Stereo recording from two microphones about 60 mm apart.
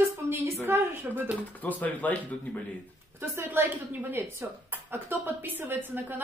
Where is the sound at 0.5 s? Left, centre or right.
Right.